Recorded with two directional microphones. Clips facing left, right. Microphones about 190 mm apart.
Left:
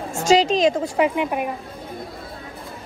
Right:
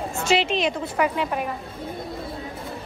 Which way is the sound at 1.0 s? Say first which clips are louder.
Left 1 dB; 15° left (ahead or behind).